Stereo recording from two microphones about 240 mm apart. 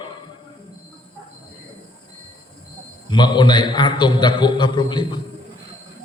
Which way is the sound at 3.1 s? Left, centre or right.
Centre.